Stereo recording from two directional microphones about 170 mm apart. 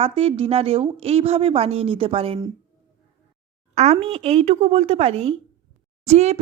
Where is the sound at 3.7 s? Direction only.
40° right (ahead or behind).